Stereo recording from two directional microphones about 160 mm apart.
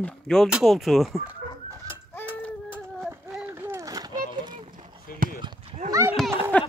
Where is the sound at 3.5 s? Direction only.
15° right (ahead or behind).